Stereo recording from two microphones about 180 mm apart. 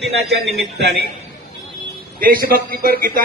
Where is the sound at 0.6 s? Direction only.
65° right (ahead or behind).